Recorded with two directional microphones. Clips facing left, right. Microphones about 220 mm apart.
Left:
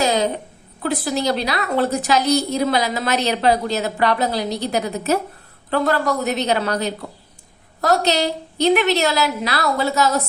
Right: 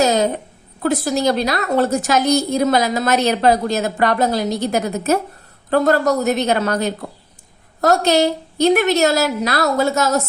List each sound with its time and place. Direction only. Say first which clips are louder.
0.0 s a woman's voice: right 3 dB; 45° right (ahead or behind)